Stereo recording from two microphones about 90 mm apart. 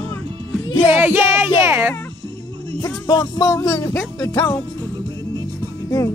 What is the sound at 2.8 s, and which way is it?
Music, 45° left (ahead or behind).